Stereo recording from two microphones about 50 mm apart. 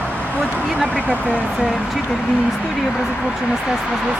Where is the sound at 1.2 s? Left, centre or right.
Left.